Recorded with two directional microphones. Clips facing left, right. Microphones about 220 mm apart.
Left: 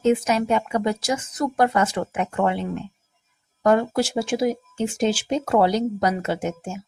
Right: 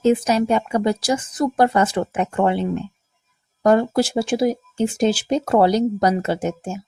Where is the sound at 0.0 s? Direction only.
35° right (ahead or behind).